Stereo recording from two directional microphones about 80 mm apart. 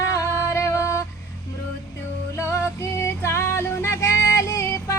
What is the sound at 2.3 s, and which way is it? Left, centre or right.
Music, left.